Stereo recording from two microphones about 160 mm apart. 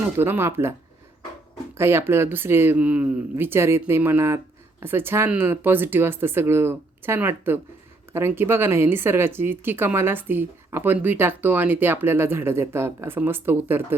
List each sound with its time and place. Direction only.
0.0 s speech: 15° right (ahead or behind)
1.8 s speech: 15° right (ahead or behind)